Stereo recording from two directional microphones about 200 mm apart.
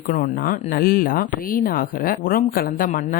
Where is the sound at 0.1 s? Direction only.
45° left (ahead or behind).